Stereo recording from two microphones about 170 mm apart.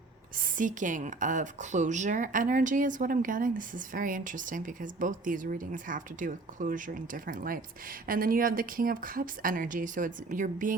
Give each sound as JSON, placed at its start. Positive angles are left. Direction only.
{"t": 0.3, "sound": "speech", "side_deg": -50}